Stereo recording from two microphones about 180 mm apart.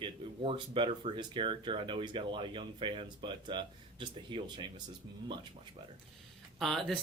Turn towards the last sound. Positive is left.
turn(degrees=0)  # may be behind; listen again after turning